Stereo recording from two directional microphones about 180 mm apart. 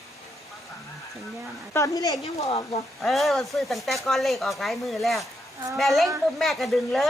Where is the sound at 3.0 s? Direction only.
Centre (ahead or behind).